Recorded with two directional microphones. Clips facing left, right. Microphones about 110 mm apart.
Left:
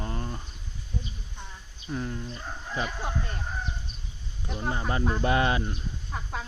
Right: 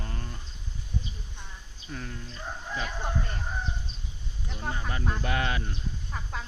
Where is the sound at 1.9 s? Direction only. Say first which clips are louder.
Left 6 dB; 25° left (ahead or behind).